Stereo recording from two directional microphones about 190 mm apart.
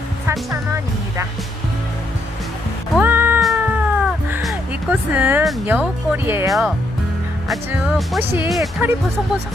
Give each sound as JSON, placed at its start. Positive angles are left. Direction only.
{"t": 0.3, "sound": "music", "side_deg": -15}
{"t": 2.9, "sound": "cat", "side_deg": -10}
{"t": 4.4, "sound": "music", "side_deg": -10}
{"t": 5.6, "sound": "speech", "side_deg": -10}
{"t": 6.5, "sound": "speech", "side_deg": 0}